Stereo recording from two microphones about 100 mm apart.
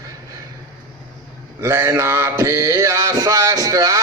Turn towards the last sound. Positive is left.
turn(degrees=-35)  # may be behind; listen again after turning